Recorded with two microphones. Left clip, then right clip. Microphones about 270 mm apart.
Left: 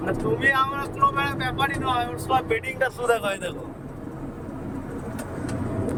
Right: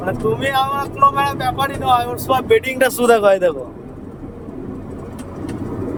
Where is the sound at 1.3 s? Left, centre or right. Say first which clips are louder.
Right 6 dB; centre.